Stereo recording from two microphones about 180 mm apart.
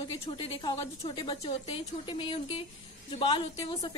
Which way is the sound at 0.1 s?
30° left (ahead or behind).